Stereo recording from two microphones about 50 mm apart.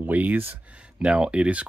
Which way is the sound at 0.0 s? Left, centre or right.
Right.